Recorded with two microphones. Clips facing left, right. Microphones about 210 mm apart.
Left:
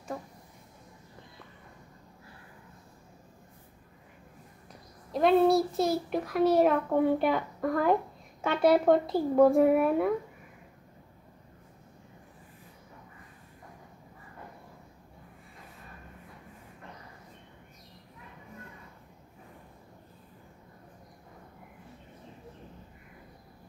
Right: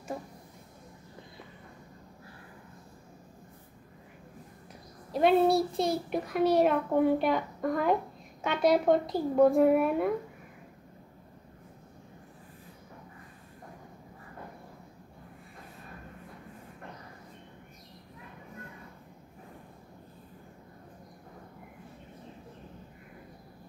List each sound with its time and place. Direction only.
5.1 s a child's voice: centre (ahead or behind)